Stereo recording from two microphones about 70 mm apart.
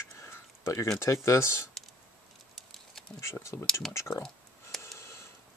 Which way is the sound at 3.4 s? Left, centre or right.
Left.